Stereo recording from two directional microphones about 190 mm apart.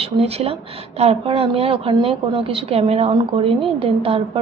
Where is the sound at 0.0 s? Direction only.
30° right (ahead or behind).